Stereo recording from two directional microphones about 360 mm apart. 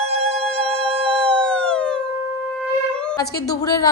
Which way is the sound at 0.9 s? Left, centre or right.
Centre.